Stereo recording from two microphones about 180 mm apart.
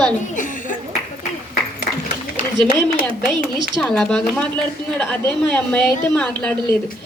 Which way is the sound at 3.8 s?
5° left (ahead or behind).